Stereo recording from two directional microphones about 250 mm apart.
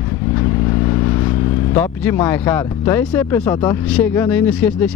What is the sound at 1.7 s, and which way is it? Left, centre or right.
Speech, centre.